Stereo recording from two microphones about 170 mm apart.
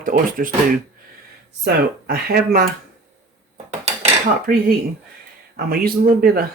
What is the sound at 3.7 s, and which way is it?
Dishes, 40° right (ahead or behind).